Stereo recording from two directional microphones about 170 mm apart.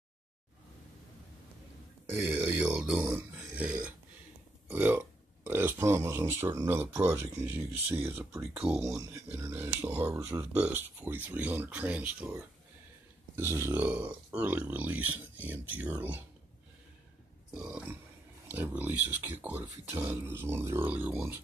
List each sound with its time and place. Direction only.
2.1 s speech: 15° right (ahead or behind)
4.6 s burping: 10° right (ahead or behind)
7.1 s speech: 15° right (ahead or behind)
10.5 s speech: 10° right (ahead or behind)
17.6 s speech: 5° right (ahead or behind)